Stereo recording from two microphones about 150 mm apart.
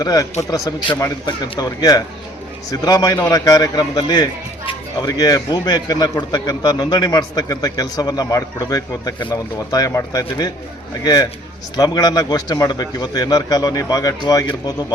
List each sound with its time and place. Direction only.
0.0 s a man's voice: 25° left (ahead or behind)